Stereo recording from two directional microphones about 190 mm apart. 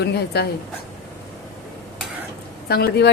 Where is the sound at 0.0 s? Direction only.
60° left (ahead or behind).